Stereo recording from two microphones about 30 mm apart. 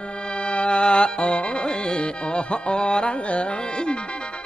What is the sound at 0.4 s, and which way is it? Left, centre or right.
Music, left.